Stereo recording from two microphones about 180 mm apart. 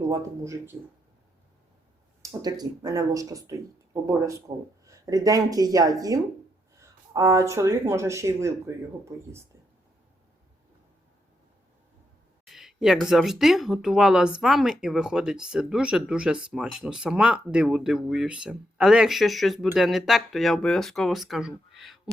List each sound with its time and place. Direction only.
0.1 s speech: 15° right (ahead or behind)
2.2 s speech: 20° right (ahead or behind)
12.5 s speech: centre (ahead or behind)
21.8 s a sound: centre (ahead or behind)